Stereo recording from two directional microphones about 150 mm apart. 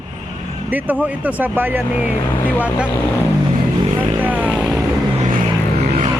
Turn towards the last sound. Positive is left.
turn(degrees=0)  # may be behind; listen again after turning